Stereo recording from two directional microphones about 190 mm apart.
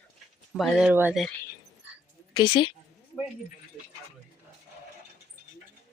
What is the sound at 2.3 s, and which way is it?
Speech, 25° left (ahead or behind).